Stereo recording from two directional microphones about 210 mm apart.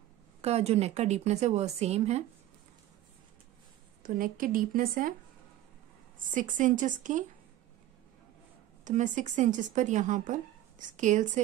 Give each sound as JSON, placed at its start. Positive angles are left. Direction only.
{"t": 0.4, "sound": "speech", "side_deg": -30}
{"t": 4.0, "sound": "speech", "side_deg": -40}
{"t": 6.1, "sound": "speech", "side_deg": -40}
{"t": 8.8, "sound": "speech", "side_deg": -35}